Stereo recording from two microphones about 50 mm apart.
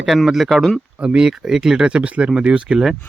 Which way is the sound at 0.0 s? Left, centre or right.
Centre.